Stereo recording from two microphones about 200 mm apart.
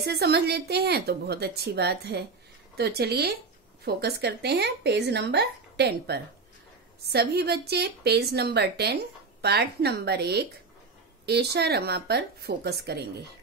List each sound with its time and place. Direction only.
0.0 s a woman's voice: 55° right (ahead or behind)